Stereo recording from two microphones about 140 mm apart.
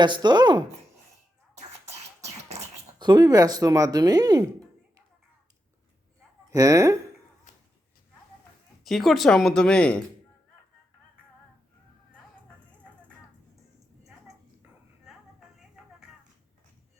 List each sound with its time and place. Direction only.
0.0 s speech: 30° right (ahead or behind)
3.0 s speech: 30° right (ahead or behind)
6.5 s speech: 25° right (ahead or behind)
8.8 s speech: centre (ahead or behind)
15.0 s vehicle: 5° right (ahead or behind)